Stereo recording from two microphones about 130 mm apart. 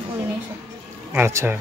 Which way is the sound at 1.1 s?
20° right (ahead or behind).